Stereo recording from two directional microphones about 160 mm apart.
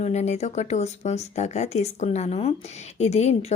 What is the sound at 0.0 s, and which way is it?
A woman's voice, 45° left (ahead or behind).